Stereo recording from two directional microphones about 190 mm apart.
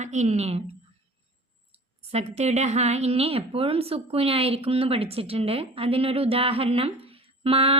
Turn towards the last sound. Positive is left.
turn(degrees=-30)  # may be behind; listen again after turning